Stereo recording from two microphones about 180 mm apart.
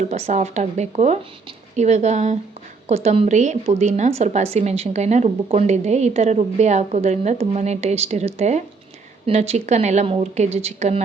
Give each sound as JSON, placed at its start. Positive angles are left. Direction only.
{"t": 0.1, "sound": "a woman's voice", "side_deg": -40}